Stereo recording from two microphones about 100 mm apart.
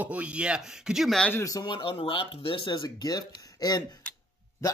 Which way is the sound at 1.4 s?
35° left (ahead or behind).